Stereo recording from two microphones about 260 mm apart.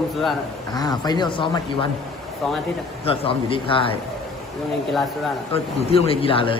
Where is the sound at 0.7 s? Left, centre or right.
Centre.